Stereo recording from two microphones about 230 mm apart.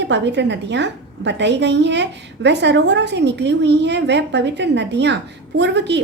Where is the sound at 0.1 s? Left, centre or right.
Right.